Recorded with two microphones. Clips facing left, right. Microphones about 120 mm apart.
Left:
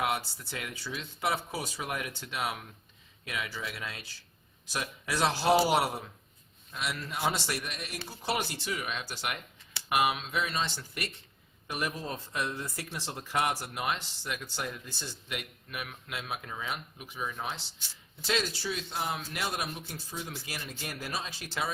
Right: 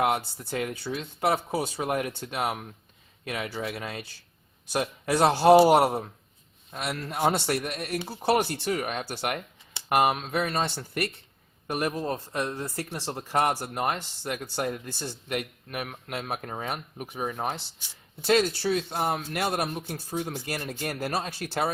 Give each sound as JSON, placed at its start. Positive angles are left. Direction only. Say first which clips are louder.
{"t": 0.0, "sound": "speech", "louder": "right 6 dB", "side_deg": -50}
{"t": 11.7, "sound": "speech", "louder": "right 7 dB", "side_deg": -45}